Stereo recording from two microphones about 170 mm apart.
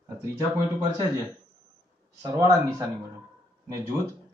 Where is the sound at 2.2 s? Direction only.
20° right (ahead or behind).